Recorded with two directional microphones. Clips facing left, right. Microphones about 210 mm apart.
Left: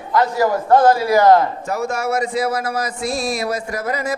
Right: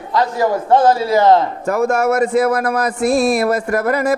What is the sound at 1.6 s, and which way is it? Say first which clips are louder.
Speech: right 6 dB; 55° right (ahead or behind).